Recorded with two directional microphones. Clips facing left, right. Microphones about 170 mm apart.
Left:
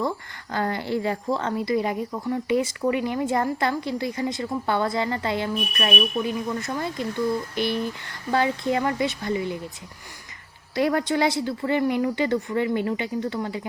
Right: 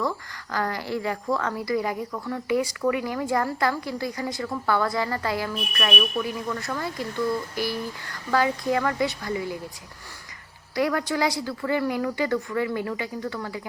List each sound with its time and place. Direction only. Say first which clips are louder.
0.5 s speech: left 2 dB; 25° left (ahead or behind)
10.8 s speech: left 2 dB; 25° left (ahead or behind)